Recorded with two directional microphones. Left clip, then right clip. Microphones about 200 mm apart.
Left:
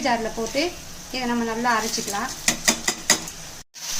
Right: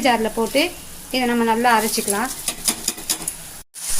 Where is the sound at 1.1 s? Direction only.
55° right (ahead or behind).